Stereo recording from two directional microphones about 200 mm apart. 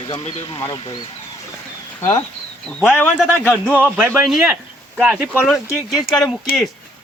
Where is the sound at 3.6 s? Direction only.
5° right (ahead or behind).